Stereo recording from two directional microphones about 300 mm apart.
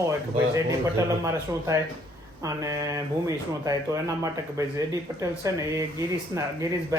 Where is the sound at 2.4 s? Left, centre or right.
Centre.